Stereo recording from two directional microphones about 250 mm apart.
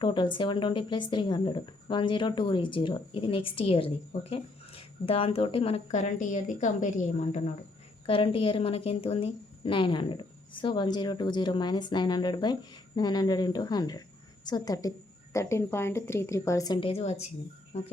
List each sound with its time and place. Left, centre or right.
0.0 s a woman's voice: centre